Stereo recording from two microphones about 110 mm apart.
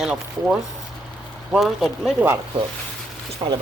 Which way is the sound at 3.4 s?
55° right (ahead or behind).